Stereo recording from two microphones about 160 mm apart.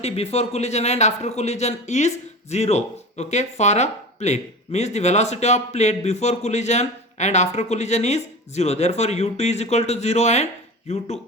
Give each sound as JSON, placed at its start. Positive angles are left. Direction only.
{"t": 0.0, "sound": "speech", "side_deg": 40}